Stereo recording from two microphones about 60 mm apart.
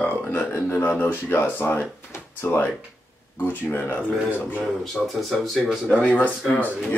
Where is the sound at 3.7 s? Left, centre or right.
Left.